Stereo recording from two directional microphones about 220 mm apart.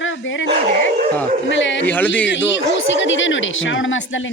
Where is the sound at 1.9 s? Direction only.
10° left (ahead or behind).